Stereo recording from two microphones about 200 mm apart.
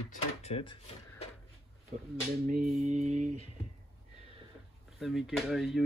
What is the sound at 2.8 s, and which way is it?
Mantra, 35° right (ahead or behind).